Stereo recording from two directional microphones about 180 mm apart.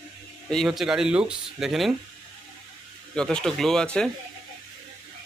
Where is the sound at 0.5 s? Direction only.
Centre (ahead or behind).